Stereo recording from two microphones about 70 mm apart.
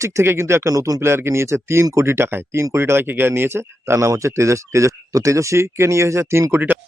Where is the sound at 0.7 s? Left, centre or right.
Right.